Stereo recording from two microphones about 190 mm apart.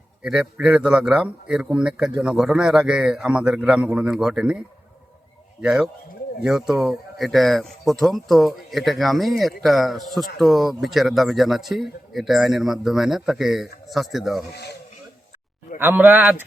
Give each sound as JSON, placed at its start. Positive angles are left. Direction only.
{"t": 0.2, "sound": "speech", "side_deg": -5}
{"t": 5.6, "sound": "speech", "side_deg": -5}
{"t": 14.5, "sound": "speech", "side_deg": 60}
{"t": 15.8, "sound": "speech", "side_deg": -10}